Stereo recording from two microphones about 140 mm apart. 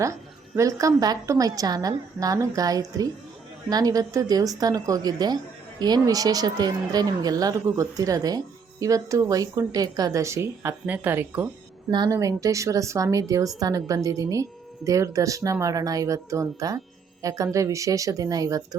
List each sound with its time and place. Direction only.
0.0 s a woman's voice: 20° right (ahead or behind)
11.9 s a woman's voice: 30° right (ahead or behind)